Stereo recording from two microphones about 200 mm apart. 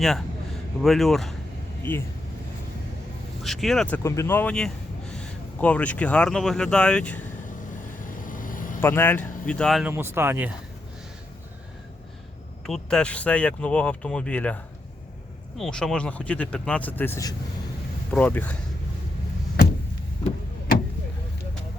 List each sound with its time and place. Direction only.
0.0 s speech: centre (ahead or behind)
3.4 s speech: centre (ahead or behind)
8.0 s vehicle: 40° left (ahead or behind)
8.8 s speech: 10° left (ahead or behind)
9.9 s speech: 10° right (ahead or behind)
12.6 s speech: 5° left (ahead or behind)